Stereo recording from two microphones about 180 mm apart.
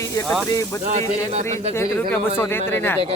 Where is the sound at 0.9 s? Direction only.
40° right (ahead or behind).